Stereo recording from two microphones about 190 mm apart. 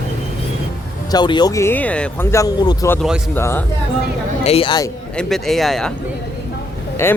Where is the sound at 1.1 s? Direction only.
20° left (ahead or behind).